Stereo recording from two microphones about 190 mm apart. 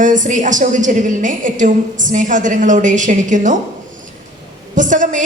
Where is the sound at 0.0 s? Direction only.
40° right (ahead or behind).